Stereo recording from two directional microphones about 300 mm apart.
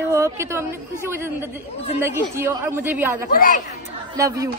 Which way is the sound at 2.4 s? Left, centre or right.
Centre.